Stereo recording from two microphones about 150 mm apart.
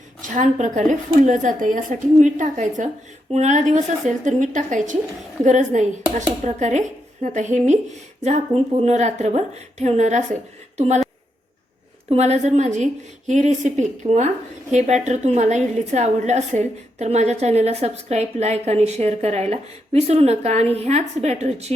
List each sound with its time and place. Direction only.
0.2 s a woman's voice: 55° right (ahead or behind)
12.0 s a woman's voice: 45° right (ahead or behind)